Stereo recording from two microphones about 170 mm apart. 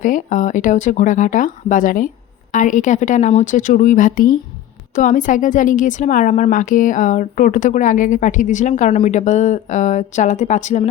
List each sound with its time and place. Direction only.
0.0 s a woman's voice: 50° left (ahead or behind)